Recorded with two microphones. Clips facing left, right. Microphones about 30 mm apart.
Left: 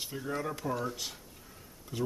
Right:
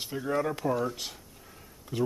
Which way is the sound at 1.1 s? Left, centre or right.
Centre.